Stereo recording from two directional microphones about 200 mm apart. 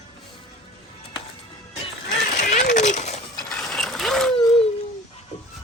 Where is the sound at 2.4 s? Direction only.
40° left (ahead or behind).